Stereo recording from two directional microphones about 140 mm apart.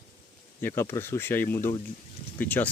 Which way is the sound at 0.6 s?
15° left (ahead or behind).